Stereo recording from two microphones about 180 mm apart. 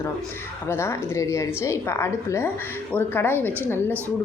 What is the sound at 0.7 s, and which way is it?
Speech, 15° left (ahead or behind).